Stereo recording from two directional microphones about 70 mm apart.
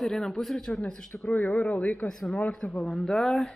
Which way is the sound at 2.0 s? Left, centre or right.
Centre.